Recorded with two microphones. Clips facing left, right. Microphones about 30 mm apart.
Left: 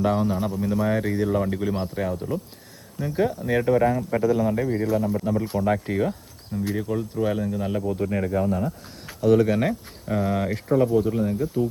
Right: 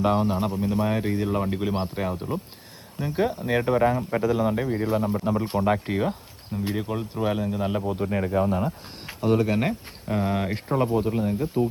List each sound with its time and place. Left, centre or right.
0.0 s a man's voice: right
1.6 s a man's voice: right
6.5 s a man's voice: right
7.2 s speech: right
8.0 s a man's voice: centre
8.3 s a man's voice: right